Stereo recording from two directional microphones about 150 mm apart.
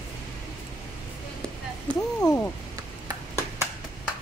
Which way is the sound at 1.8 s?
10° left (ahead or behind).